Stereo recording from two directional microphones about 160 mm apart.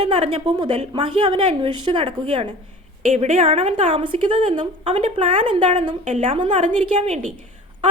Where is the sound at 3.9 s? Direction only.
30° right (ahead or behind).